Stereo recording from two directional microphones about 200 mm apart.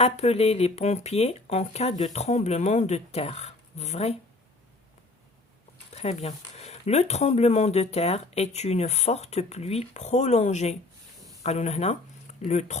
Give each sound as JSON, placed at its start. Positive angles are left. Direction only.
{"t": 0.0, "sound": "speech", "side_deg": 30}
{"t": 5.9, "sound": "speech", "side_deg": 30}